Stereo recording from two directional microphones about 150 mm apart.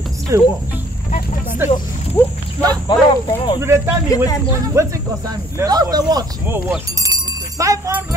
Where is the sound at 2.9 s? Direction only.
30° left (ahead or behind).